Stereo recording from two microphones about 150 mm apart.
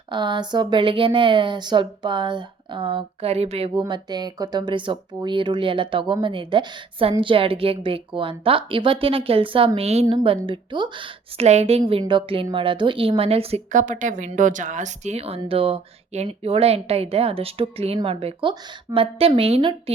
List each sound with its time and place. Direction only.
0.1 s speech: 30° right (ahead or behind)
3.8 s speech: 30° right (ahead or behind)
10.1 s speech: 35° right (ahead or behind)
11.4 s speech: 45° right (ahead or behind)
13.7 s a woman's voice: 55° right (ahead or behind); by 19.7 s 40° right (ahead or behind)